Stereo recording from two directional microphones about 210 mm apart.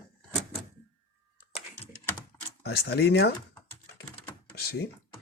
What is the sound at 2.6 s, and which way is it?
Speech, 50° left (ahead or behind).